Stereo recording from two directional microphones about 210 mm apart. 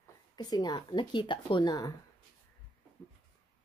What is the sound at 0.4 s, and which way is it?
Speech, 20° left (ahead or behind).